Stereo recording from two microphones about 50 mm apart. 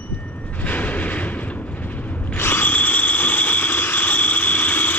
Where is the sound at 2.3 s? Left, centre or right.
Left.